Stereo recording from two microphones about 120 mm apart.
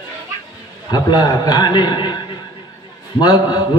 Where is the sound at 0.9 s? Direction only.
35° left (ahead or behind).